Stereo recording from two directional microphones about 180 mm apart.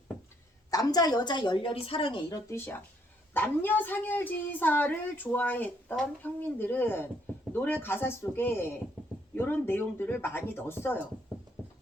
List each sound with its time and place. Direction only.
0.7 s a woman's voice: 20° left (ahead or behind)
2.5 s a woman's voice: 15° left (ahead or behind)